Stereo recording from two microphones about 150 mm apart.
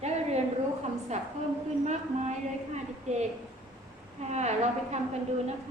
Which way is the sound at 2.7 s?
50° right (ahead or behind).